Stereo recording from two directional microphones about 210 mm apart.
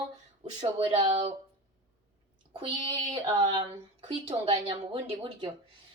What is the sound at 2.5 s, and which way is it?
Speech, 25° right (ahead or behind).